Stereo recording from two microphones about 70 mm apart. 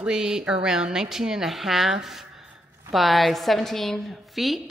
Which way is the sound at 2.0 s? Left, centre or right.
Centre.